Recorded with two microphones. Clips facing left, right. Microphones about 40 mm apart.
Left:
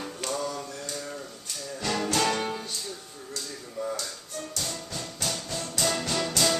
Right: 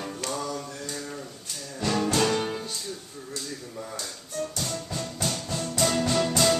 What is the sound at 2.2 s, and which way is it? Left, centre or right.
Music, centre.